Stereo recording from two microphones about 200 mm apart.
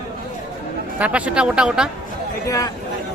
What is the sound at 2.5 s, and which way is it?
Speech, 15° left (ahead or behind).